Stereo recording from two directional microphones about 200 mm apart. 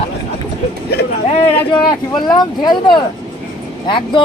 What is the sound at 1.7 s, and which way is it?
Speech, 20° left (ahead or behind).